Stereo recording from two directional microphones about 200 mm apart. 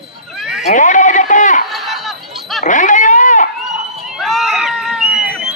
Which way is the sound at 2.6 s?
40° left (ahead or behind).